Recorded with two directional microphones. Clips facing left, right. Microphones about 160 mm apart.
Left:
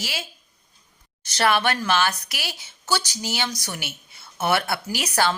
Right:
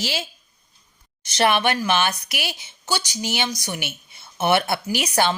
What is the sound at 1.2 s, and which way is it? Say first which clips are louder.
Speech: right 2 dB; 20° right (ahead or behind).